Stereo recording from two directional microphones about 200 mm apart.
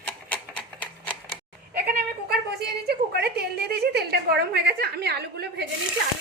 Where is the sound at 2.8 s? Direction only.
50° right (ahead or behind).